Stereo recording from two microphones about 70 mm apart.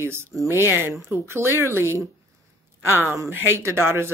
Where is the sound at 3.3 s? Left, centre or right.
Right.